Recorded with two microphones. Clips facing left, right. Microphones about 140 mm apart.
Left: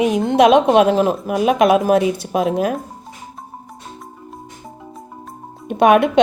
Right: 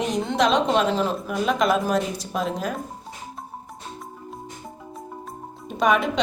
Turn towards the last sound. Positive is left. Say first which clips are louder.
# left 8 dB
turn(degrees=60)  # may be behind; listen again after turning